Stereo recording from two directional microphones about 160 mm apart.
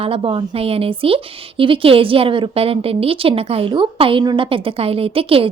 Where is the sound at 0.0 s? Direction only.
35° right (ahead or behind).